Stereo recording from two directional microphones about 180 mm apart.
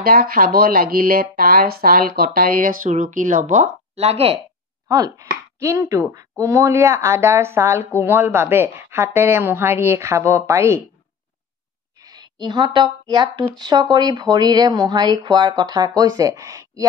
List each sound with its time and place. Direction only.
0.0 s speech: 55° right (ahead or behind); by 4.4 s 35° right (ahead or behind)
4.8 s speech: 20° right (ahead or behind)
12.0 s speech: 20° right (ahead or behind)